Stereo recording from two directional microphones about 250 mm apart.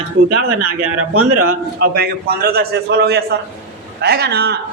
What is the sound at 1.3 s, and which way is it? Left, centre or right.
A man's voice, right.